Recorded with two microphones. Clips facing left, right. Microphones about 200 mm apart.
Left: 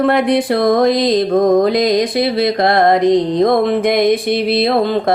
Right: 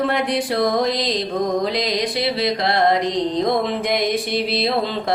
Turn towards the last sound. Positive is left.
turn(degrees=55)  # may be behind; listen again after turning